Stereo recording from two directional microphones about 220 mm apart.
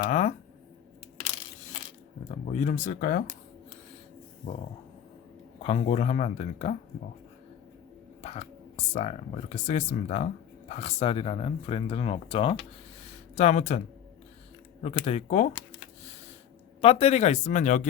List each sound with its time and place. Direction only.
0.1 s speech: 35° left (ahead or behind)
2.3 s speech: 30° left (ahead or behind)
5.6 s speech: 30° left (ahead or behind)
8.2 s speech: 30° left (ahead or behind)
13.1 s a sound: 30° left (ahead or behind)
14.8 s speech: 30° left (ahead or behind)
16.8 s speech: 25° left (ahead or behind)